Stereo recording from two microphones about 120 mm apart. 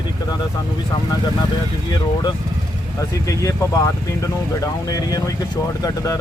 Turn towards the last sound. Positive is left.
turn(degrees=30)  # may be behind; listen again after turning